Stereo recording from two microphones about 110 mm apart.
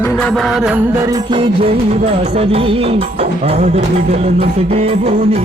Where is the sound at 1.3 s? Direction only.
50° right (ahead or behind); by 5.4 s 70° right (ahead or behind).